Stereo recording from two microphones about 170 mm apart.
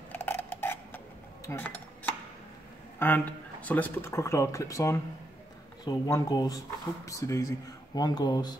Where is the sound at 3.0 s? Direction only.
10° left (ahead or behind).